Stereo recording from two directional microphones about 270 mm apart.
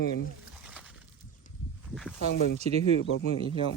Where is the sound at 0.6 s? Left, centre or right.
Centre.